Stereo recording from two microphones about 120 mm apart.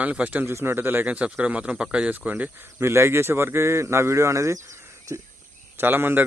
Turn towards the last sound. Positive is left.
turn(degrees=-15)  # may be behind; listen again after turning